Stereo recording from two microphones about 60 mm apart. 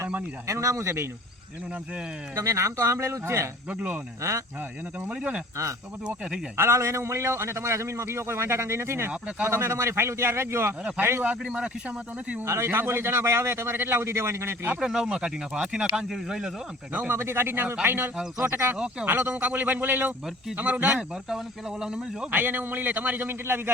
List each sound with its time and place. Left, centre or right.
0.4 s speech: right
2.3 s speech: right
3.7 s speech: right
4.2 s speech: right
4.9 s speech: right
6.6 s a man's voice: right
11.2 s speech: centre
12.5 s a man's voice: right
14.8 s speech: centre
16.9 s a man's voice: right
17.2 s a man's voice: right
19.0 s a man's voice: right
20.9 s speech: centre
22.3 s a man's voice: right